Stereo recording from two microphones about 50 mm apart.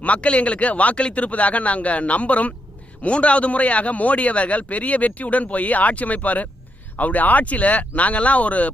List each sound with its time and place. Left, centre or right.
0.0 s a man's voice: left